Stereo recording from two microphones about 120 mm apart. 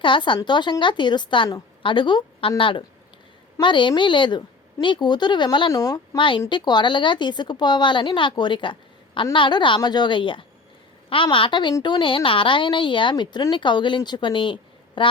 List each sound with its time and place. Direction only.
0.0 s a woman's voice: 45° left (ahead or behind)
5.7 s speech: 30° left (ahead or behind)
6.1 s speech: 45° left (ahead or behind)